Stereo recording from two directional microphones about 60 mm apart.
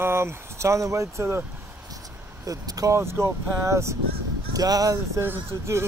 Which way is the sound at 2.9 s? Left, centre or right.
Right.